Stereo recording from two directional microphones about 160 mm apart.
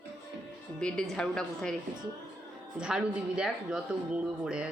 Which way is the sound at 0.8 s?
5° left (ahead or behind).